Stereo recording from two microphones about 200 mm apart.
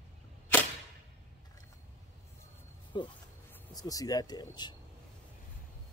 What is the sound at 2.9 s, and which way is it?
Speech, 25° left (ahead or behind).